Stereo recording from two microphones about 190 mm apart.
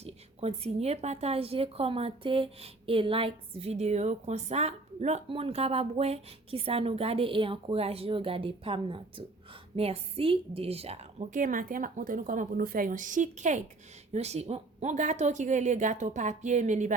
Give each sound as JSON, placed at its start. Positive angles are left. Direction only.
{"t": 0.0, "sound": "a woman's voice", "side_deg": -35}